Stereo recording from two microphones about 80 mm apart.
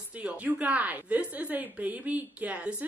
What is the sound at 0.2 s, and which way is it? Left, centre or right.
A woman's voice, centre.